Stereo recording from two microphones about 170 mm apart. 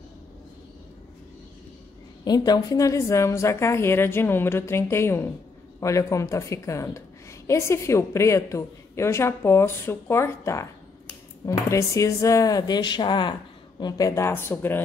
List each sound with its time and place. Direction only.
2.2 s a woman's voice: 25° left (ahead or behind)